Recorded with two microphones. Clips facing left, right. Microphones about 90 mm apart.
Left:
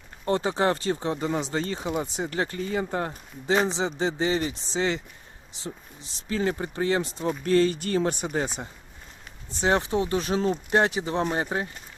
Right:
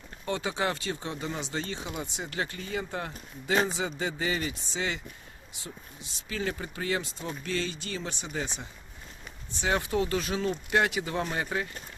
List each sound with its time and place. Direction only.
0.3 s speech: 35° left (ahead or behind)
3.4 s speech: 30° left (ahead or behind)